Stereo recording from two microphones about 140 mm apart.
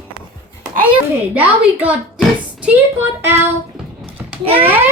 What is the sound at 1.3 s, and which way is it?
Speech, 10° right (ahead or behind).